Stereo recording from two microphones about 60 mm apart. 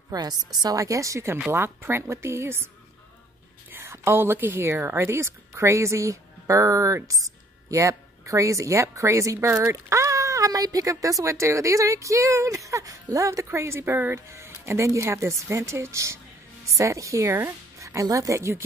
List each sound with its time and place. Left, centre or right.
0.1 s a woman's voice: right
1.5 s a woman's voice: right
3.7 s speech: right
13.6 s a woman's voice: right
14.3 s speech: right
17.3 s a woman's voice: right
17.7 s a woman's voice: right